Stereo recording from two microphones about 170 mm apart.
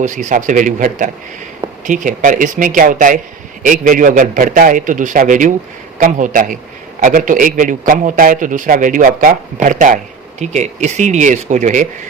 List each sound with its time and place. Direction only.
0.0 s a man's voice: 45° right (ahead or behind)